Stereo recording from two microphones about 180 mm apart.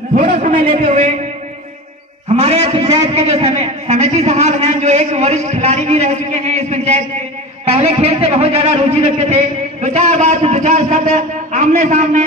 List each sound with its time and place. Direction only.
0.1 s a man's voice: 45° right (ahead or behind)
2.2 s a man's voice: 35° right (ahead or behind)